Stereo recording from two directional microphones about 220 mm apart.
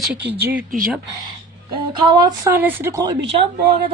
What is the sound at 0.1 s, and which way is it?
Speech, 5° right (ahead or behind).